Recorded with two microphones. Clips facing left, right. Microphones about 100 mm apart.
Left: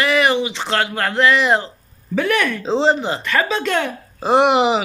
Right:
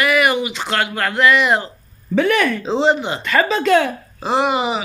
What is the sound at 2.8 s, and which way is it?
Speech, 35° left (ahead or behind).